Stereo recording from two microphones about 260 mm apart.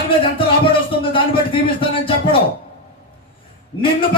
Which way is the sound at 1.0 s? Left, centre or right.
Centre.